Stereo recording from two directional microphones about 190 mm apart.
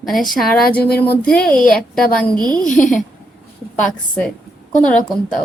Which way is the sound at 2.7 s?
40° left (ahead or behind).